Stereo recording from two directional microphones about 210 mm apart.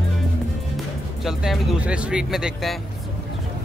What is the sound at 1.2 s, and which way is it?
Speech, centre (ahead or behind).